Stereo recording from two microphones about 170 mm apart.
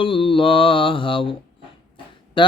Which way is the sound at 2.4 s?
30° left (ahead or behind).